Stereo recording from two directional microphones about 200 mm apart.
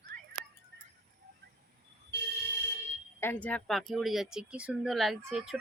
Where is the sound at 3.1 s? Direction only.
10° left (ahead or behind).